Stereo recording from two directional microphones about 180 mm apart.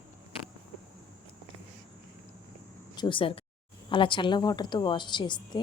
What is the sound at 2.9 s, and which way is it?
A woman's voice, 25° left (ahead or behind).